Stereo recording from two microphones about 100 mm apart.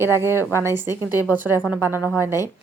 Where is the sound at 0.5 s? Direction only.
25° right (ahead or behind).